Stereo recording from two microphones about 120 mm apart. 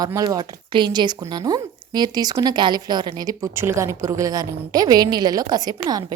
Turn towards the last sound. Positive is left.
turn(degrees=-35)  # may be behind; listen again after turning